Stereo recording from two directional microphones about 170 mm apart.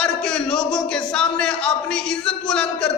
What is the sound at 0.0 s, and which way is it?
A man's voice, 5° left (ahead or behind).